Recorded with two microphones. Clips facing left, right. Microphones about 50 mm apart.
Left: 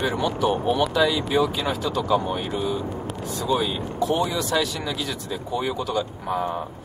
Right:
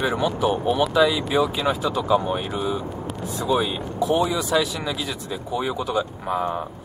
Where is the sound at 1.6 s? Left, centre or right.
Centre.